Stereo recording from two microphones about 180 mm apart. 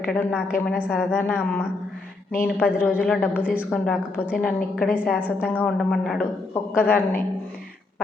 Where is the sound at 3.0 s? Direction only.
10° left (ahead or behind).